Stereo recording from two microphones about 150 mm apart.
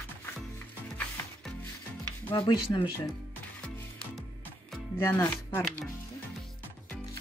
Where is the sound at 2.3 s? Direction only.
35° left (ahead or behind).